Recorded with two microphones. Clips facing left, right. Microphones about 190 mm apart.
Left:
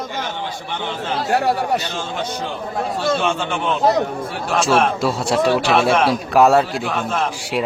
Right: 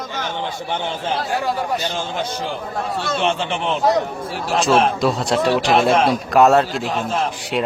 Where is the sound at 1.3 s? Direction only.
70° left (ahead or behind).